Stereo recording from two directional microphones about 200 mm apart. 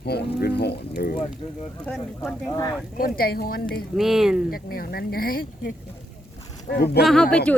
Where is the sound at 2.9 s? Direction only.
45° left (ahead or behind).